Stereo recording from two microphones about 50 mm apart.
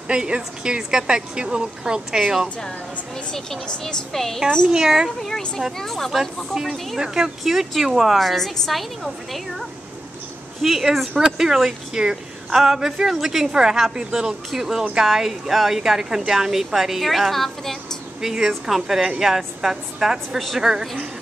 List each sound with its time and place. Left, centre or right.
0.1 s a woman's voice: centre
3.3 s speech: centre
4.1 s speech: centre
4.6 s a woman's voice: centre
5.8 s speech: centre
6.1 s a woman's voice: centre